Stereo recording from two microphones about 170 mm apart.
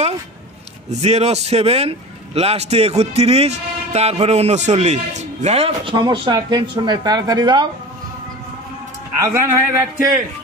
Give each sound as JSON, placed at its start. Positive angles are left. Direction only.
{"t": 0.8, "sound": "speech", "side_deg": -40}
{"t": 9.2, "sound": "a man's voice", "side_deg": -15}